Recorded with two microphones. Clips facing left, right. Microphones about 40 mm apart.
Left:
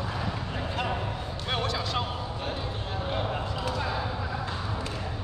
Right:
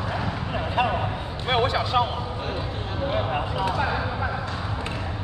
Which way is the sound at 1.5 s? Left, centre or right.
Right.